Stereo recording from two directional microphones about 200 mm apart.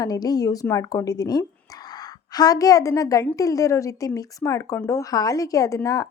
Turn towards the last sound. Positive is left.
turn(degrees=15)  # may be behind; listen again after turning